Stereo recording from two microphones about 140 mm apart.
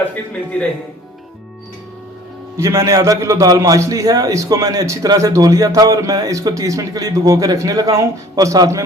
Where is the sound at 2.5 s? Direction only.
20° right (ahead or behind).